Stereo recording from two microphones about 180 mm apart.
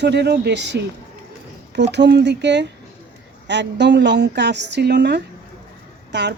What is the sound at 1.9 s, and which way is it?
A woman's voice, 70° right (ahead or behind).